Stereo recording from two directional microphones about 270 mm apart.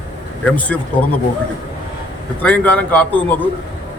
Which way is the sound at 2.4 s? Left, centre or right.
Centre.